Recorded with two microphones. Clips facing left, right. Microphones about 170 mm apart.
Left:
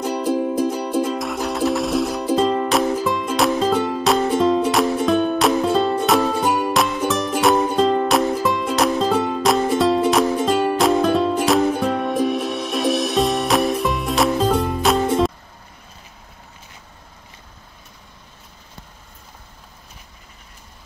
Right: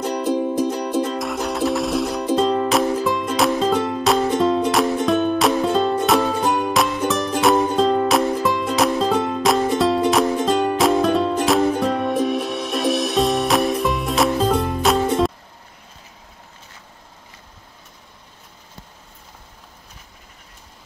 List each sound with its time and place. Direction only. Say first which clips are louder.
0.0 s music: even; 5° left (ahead or behind)